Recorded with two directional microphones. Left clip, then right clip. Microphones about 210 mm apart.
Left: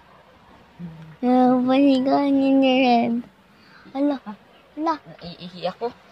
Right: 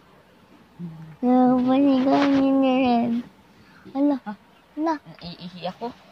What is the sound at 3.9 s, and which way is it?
Speech, 10° left (ahead or behind).